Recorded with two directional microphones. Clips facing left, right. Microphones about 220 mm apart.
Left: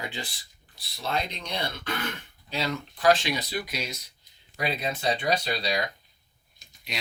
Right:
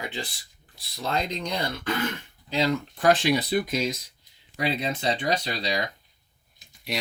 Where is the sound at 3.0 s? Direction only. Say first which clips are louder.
Right 2 dB; 55° right (ahead or behind).